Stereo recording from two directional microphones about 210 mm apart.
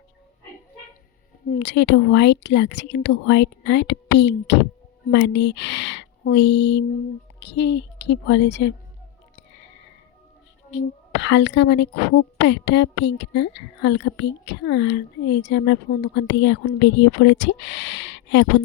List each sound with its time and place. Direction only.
1.5 s speech: 55° left (ahead or behind)
11.2 s speech: 55° left (ahead or behind)